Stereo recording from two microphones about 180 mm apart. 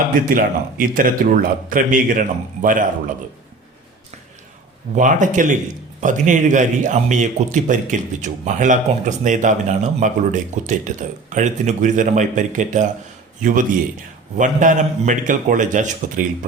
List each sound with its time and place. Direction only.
0.1 s speech: 50° right (ahead or behind)
4.9 s speech: 45° right (ahead or behind)